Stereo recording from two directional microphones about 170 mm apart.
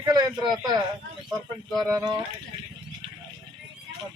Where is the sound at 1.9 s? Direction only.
20° right (ahead or behind).